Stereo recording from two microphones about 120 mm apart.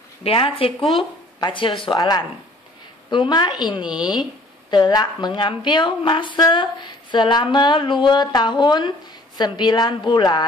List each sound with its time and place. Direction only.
0.2 s speech: 50° left (ahead or behind)